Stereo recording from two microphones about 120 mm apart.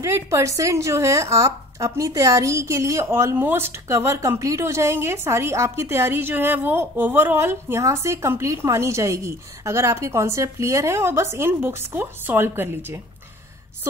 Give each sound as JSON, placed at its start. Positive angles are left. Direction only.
{"t": 0.0, "sound": "speech", "side_deg": -25}